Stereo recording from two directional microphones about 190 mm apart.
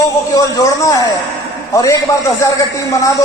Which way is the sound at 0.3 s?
15° left (ahead or behind).